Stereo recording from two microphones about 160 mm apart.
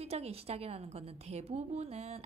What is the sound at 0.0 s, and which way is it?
A woman's voice, 40° right (ahead or behind).